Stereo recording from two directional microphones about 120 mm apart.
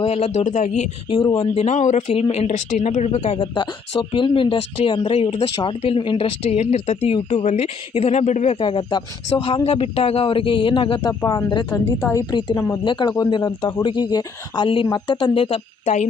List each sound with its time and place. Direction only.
0.0 s a man's voice: 55° left (ahead or behind); by 0.9 s 75° left (ahead or behind)
1.1 s speech: 40° left (ahead or behind)
1.5 s a man's voice: 75° left (ahead or behind)
2.1 s speech: 55° left (ahead or behind)
3.3 s speech: 45° left (ahead or behind)
6.6 s speech: 65° left (ahead or behind)
8.6 s speech: 45° left (ahead or behind)
9.6 s speech: 55° left (ahead or behind)
11.0 s speech: 35° left (ahead or behind)
11.7 s a woman's voice: 20° left (ahead or behind)
12.1 s speech: 40° left (ahead or behind)